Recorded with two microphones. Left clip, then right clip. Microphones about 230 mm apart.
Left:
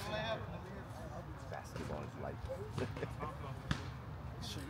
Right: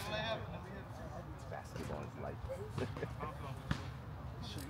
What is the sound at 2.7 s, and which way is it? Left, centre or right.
Speech, centre.